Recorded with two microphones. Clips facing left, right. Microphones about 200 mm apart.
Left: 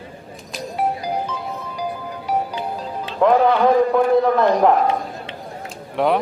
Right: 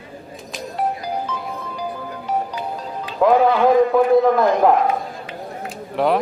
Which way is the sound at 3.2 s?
5° right (ahead or behind).